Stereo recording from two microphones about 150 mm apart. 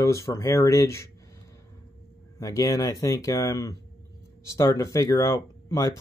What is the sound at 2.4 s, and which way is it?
Speech, 20° left (ahead or behind).